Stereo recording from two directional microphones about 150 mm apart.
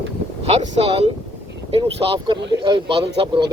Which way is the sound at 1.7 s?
35° right (ahead or behind).